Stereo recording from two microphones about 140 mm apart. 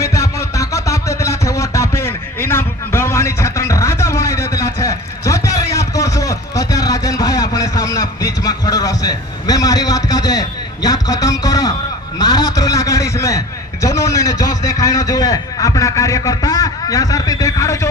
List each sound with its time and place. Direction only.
0.0 s music: 20° left (ahead or behind)
10.8 s a sound: 25° left (ahead or behind)
13.8 s a man's voice: 25° left (ahead or behind)